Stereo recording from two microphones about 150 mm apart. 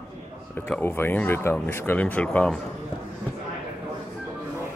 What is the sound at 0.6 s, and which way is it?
Speech, 10° left (ahead or behind).